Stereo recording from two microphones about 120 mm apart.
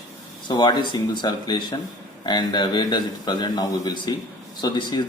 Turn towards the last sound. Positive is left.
turn(degrees=40)  # may be behind; listen again after turning